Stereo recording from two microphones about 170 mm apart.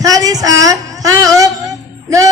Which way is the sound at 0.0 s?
20° right (ahead or behind).